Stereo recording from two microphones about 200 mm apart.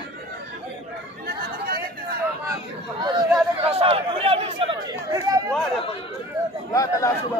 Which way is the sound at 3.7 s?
30° right (ahead or behind).